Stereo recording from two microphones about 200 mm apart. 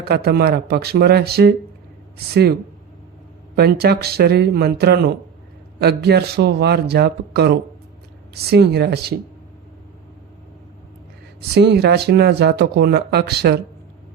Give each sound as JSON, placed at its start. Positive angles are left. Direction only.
{"t": 0.0, "sound": "speech", "side_deg": -50}
{"t": 3.5, "sound": "speech", "side_deg": -50}
{"t": 11.5, "sound": "speech", "side_deg": -55}